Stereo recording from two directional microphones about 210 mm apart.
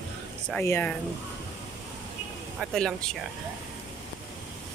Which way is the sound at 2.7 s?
5° left (ahead or behind).